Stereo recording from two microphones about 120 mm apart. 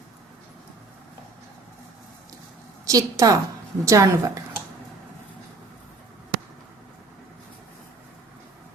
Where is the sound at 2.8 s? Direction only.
30° right (ahead or behind).